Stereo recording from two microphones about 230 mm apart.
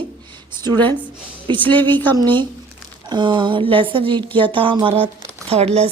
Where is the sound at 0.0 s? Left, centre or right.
Centre.